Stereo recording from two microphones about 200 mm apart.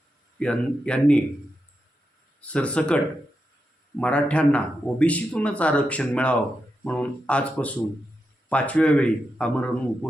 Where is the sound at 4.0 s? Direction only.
5° left (ahead or behind).